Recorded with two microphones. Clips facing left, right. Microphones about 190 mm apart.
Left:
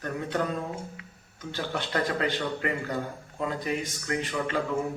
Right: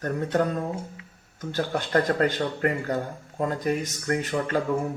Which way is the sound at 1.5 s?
45° right (ahead or behind).